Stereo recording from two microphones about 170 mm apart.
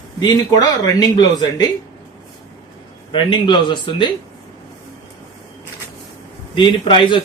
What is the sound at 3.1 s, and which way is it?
Speech, 30° left (ahead or behind).